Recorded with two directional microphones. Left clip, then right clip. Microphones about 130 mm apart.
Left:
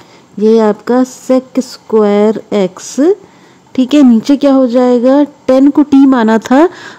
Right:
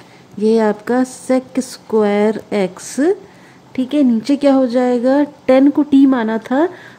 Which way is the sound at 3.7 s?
45° left (ahead or behind).